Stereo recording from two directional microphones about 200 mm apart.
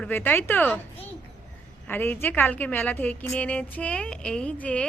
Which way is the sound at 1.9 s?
10° left (ahead or behind).